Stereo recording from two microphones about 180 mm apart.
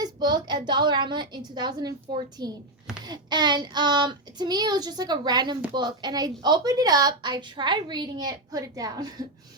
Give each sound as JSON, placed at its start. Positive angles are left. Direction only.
{"t": 0.0, "sound": "a woman's voice", "side_deg": -25}